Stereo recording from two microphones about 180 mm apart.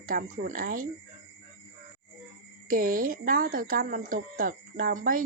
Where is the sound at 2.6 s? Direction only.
50° right (ahead or behind).